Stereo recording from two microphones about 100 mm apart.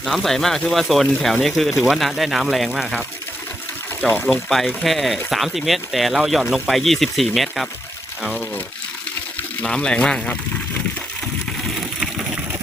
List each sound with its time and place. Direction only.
0.0 s speech: centre (ahead or behind)
4.0 s speech: 15° left (ahead or behind)
4.4 s speech: centre (ahead or behind)
9.6 s speech: 10° left (ahead or behind)